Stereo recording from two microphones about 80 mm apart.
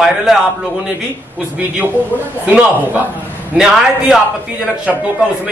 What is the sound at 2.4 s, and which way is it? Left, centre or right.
Speech, centre.